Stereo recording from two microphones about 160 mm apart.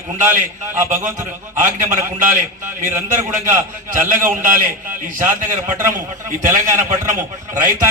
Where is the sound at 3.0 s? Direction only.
55° right (ahead or behind).